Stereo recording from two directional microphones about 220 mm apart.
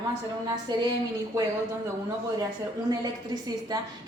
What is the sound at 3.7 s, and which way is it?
Speech, 20° right (ahead or behind).